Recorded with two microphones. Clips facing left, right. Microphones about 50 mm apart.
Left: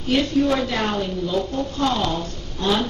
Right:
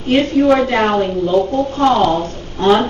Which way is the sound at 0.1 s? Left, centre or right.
Right.